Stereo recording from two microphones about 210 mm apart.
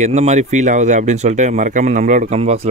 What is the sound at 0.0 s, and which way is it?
Speech, 30° right (ahead or behind).